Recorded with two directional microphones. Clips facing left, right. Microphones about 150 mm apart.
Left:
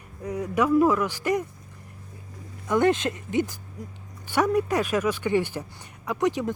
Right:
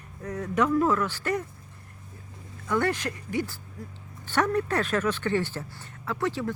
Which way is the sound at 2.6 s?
20° left (ahead or behind).